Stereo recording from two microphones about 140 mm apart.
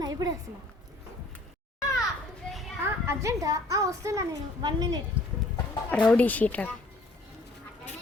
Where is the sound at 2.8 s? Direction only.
20° right (ahead or behind).